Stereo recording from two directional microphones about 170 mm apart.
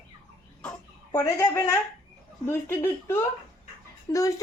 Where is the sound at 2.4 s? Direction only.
15° left (ahead or behind).